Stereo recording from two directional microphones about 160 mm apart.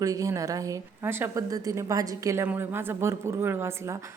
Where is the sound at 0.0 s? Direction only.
20° right (ahead or behind).